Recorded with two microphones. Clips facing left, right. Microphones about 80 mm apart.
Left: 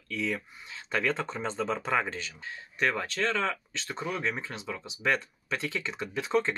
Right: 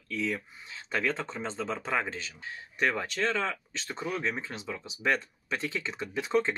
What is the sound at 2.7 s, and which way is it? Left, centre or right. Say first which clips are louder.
Speech: even; centre.